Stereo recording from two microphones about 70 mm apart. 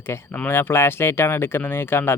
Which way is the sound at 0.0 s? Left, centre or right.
Left.